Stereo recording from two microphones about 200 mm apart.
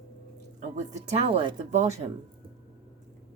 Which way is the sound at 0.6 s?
35° right (ahead or behind).